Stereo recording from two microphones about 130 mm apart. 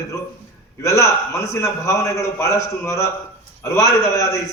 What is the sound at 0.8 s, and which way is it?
A man's voice, 25° left (ahead or behind).